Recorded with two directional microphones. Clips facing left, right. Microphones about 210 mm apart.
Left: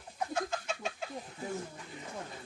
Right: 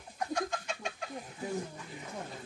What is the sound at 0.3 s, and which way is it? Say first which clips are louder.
Chicken: right 1 dB; 5° left (ahead or behind).